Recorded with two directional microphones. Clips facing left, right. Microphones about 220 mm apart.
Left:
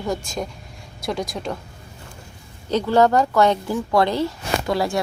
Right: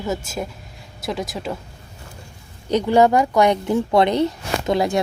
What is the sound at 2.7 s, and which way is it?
A woman's voice, 15° right (ahead or behind).